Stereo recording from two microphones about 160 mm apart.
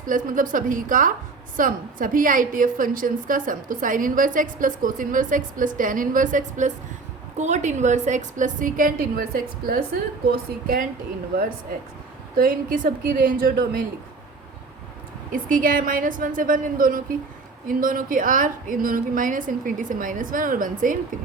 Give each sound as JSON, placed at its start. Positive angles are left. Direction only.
{"t": 0.3, "sound": "a woman's voice", "side_deg": -55}
{"t": 12.4, "sound": "a woman's voice", "side_deg": -60}
{"t": 15.3, "sound": "a woman's voice", "side_deg": -60}